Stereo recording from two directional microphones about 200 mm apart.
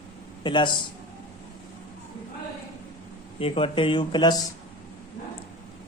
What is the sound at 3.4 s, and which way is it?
Speech, 25° left (ahead or behind).